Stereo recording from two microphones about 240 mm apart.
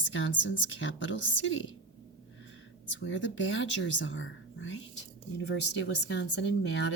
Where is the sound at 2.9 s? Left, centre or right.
Left.